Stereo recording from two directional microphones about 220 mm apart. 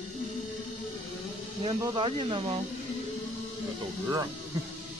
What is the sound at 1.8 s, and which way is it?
Speech, 20° right (ahead or behind).